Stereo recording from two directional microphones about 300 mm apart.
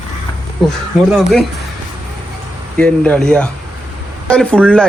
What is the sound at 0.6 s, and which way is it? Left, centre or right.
Speech, centre.